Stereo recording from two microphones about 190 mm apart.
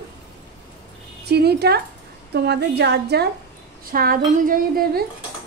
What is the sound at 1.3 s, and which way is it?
Speech, 60° right (ahead or behind).